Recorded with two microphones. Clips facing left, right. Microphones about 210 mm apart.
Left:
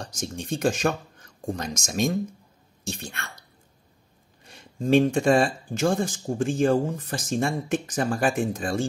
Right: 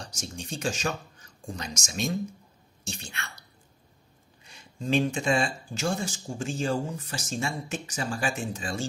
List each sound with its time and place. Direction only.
0.0 s speech: 55° left (ahead or behind)
4.5 s a sound: 55° left (ahead or behind)
5.1 s speech: 55° left (ahead or behind)